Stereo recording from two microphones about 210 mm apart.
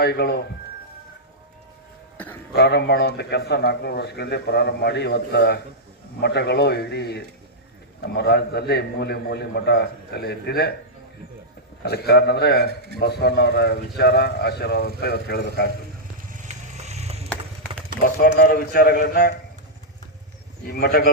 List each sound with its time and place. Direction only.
0.0 s speech: 50° left (ahead or behind)
2.1 s a sound: 5° left (ahead or behind)
2.5 s speech: 50° left (ahead or behind)
11.9 s speech: 50° left (ahead or behind)
16.3 s a sound: 35° right (ahead or behind)
18.0 s speech: 45° left (ahead or behind)
20.7 s speech: 50° left (ahead or behind)